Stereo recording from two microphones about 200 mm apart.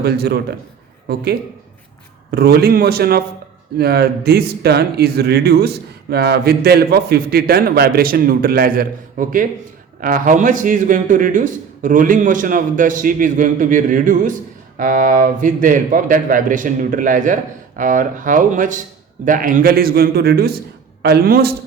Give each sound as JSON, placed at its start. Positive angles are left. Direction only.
{"t": 0.0, "sound": "speech", "side_deg": -55}